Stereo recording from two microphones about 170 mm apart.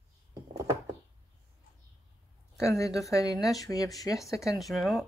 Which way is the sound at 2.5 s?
15° left (ahead or behind).